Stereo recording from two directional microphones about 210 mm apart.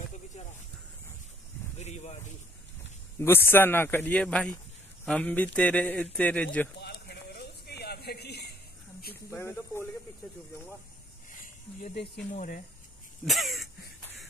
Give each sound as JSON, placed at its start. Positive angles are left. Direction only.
{"t": 1.8, "sound": "speech", "side_deg": 30}
{"t": 3.2, "sound": "a man's voice", "side_deg": 10}
{"t": 6.8, "sound": "a sound", "side_deg": 50}
{"t": 9.3, "sound": "a man's voice", "side_deg": 10}
{"t": 11.4, "sound": "speech", "side_deg": 45}
{"t": 13.2, "sound": "a sound", "side_deg": 0}